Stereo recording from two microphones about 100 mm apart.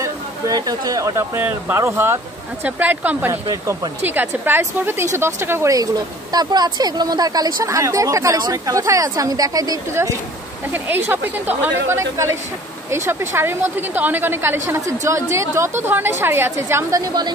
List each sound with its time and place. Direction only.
0.0 s speech: 40° right (ahead or behind); by 3.3 s 20° right (ahead or behind)
3.4 s speech: 40° right (ahead or behind)
4.0 s a woman's voice: 20° right (ahead or behind)
6.3 s speech: 45° right (ahead or behind)
10.7 s a woman's voice: 20° right (ahead or behind)
12.0 s a woman's voice: 30° right (ahead or behind)